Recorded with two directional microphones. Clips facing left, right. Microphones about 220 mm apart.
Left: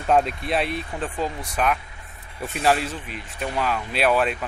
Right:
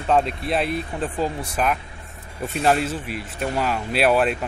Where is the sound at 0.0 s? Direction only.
5° left (ahead or behind).